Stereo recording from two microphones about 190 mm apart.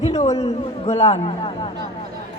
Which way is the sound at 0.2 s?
35° left (ahead or behind).